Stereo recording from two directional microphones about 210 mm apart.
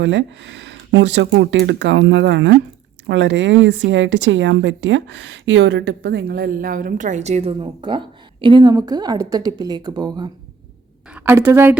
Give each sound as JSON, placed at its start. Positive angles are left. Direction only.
{"t": 0.0, "sound": "speech", "side_deg": -60}
{"t": 11.1, "sound": "a woman's voice", "side_deg": -10}